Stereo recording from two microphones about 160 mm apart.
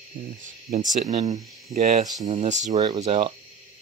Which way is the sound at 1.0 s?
40° right (ahead or behind).